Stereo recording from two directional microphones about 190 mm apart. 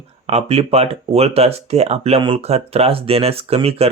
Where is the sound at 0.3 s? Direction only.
35° right (ahead or behind).